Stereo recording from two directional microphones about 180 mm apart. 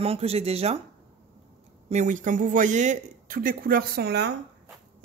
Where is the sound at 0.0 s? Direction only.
35° right (ahead or behind).